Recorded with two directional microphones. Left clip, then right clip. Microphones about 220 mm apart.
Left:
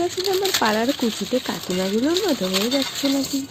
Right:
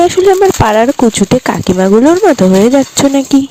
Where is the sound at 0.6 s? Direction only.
50° right (ahead or behind).